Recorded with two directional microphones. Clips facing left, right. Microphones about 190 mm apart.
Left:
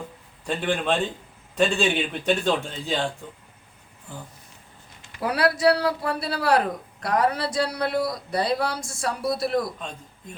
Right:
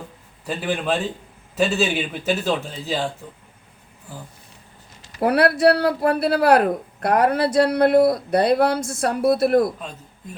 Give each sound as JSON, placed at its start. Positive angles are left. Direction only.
{"t": 0.4, "sound": "a man's voice", "side_deg": -5}
{"t": 5.2, "sound": "speech", "side_deg": -60}